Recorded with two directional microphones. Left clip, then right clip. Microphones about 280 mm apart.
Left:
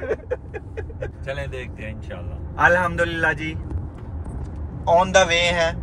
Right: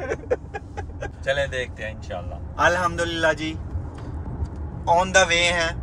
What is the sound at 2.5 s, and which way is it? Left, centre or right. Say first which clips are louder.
Speech: left 3 dB; centre.